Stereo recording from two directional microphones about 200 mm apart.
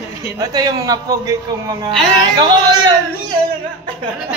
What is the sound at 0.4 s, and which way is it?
Speech, 20° right (ahead or behind).